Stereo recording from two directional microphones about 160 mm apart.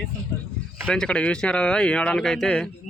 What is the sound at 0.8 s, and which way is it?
Speech, 5° left (ahead or behind).